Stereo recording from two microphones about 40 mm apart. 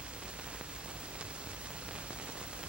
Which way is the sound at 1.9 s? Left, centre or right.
Right.